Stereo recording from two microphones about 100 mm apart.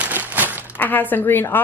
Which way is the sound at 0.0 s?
20° right (ahead or behind).